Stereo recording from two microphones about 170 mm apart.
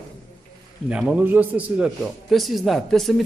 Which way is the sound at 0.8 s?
5° right (ahead or behind).